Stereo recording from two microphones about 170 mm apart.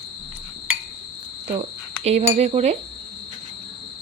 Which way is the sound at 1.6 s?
40° right (ahead or behind).